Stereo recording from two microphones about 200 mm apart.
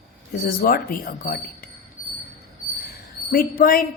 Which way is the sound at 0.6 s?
45° left (ahead or behind).